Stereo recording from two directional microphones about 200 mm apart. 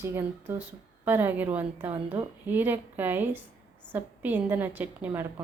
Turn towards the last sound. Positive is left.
turn(degrees=-10)  # may be behind; listen again after turning